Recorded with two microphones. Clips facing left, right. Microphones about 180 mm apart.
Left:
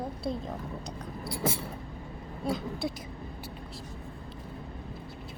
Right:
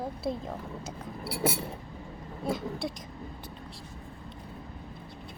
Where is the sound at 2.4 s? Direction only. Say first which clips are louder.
Even; centre (ahead or behind).